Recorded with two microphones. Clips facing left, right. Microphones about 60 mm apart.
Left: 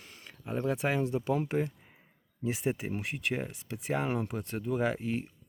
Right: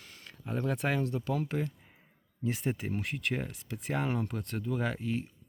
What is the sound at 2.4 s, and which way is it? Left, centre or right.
Speech, centre.